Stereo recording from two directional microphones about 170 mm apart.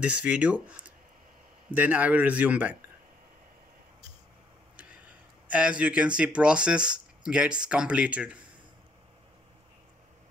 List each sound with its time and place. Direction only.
0.0 s speech: 5° right (ahead or behind)
4.7 s speech: 10° right (ahead or behind)